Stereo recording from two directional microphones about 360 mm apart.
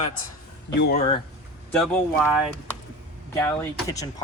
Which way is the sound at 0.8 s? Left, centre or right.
Left.